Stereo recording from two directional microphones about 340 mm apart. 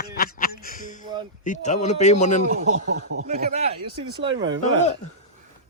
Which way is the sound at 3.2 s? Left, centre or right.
Centre.